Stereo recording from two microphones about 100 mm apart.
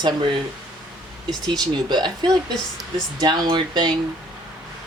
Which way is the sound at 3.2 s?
50° right (ahead or behind).